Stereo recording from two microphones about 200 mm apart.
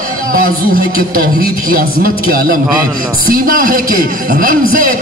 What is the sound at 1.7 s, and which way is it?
A man's voice, 45° right (ahead or behind).